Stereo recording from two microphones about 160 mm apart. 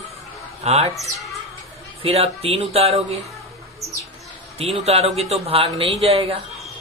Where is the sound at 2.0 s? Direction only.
40° right (ahead or behind).